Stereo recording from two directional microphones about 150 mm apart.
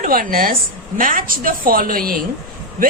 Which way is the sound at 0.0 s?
70° right (ahead or behind).